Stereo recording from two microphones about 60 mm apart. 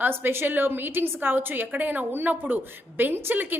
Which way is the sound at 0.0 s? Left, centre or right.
Right.